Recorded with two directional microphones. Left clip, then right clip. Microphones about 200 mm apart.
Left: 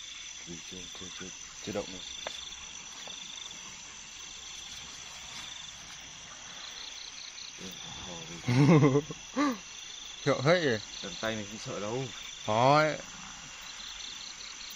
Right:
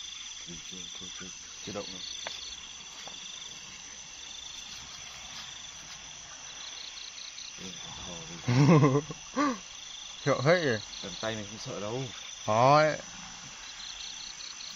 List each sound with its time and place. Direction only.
8.1 s speech: 25° right (ahead or behind)